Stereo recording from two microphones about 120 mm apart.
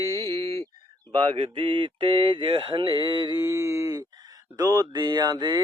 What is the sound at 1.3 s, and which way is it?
Mantra, 45° right (ahead or behind).